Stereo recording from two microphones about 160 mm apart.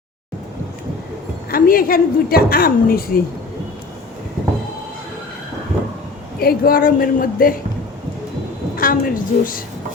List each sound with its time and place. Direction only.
1.5 s a woman's voice: 65° left (ahead or behind)
6.4 s a woman's voice: 65° left (ahead or behind)
8.7 s a woman's voice: 65° left (ahead or behind)